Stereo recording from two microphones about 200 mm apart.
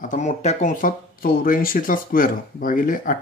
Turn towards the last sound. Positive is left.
turn(degrees=45)  # may be behind; listen again after turning